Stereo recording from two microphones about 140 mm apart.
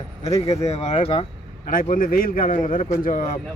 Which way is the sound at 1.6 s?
90° left.